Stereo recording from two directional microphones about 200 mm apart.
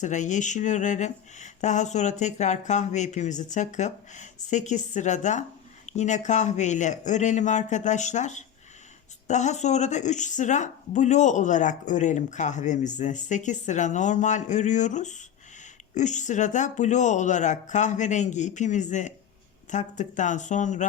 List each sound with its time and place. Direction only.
0.0 s speech: 40° left (ahead or behind)